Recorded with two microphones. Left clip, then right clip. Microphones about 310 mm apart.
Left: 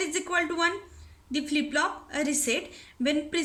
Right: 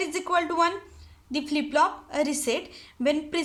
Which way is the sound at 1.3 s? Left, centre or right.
Centre.